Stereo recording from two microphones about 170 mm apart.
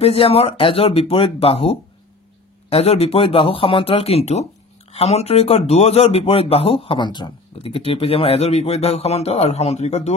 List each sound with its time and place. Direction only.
0.0 s speech: 35° left (ahead or behind)